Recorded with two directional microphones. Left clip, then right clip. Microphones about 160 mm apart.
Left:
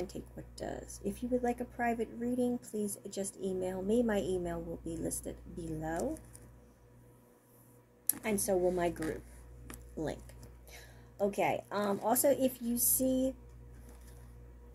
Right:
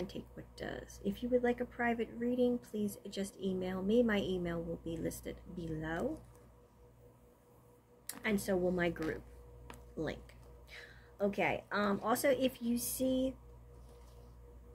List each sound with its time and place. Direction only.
0.0 s speech: 40° right (ahead or behind)
8.2 s speech: 40° right (ahead or behind)
10.7 s a woman's voice: 40° right (ahead or behind)